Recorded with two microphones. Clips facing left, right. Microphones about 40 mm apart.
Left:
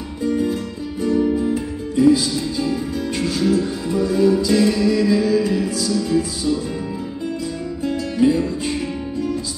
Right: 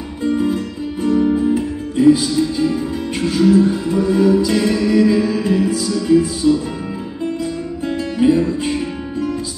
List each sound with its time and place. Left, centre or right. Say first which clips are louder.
0.2 s music: right 3 dB; right
7.8 s music: right 2 dB; right